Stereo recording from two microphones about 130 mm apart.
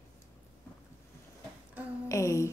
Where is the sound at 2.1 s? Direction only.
25° left (ahead or behind).